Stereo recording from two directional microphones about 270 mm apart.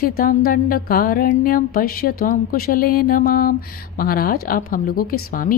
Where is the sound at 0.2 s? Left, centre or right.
Left.